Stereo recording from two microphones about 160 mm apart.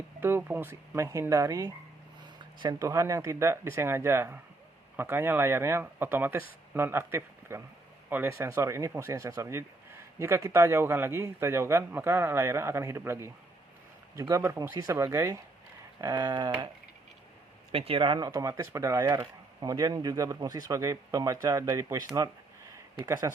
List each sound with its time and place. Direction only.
0.2 s speech: 15° right (ahead or behind)
17.7 s speech: 35° right (ahead or behind); by 23.3 s 20° right (ahead or behind)